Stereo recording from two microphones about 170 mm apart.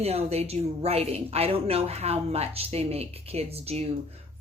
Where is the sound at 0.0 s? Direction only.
35° right (ahead or behind).